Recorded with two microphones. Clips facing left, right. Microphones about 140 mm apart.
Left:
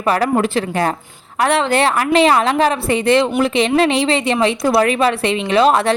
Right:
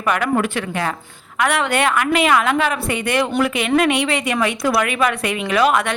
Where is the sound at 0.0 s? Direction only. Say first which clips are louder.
Left 3 dB; 30° left (ahead or behind).